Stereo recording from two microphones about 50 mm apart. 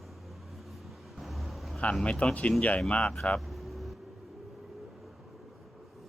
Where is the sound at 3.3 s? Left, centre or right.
Centre.